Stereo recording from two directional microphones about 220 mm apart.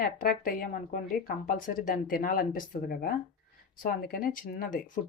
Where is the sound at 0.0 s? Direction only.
40° left (ahead or behind).